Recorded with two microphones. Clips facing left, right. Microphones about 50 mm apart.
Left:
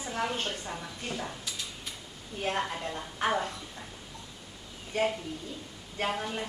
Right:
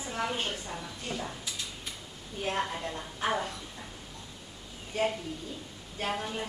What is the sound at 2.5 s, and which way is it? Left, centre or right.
Speech, centre.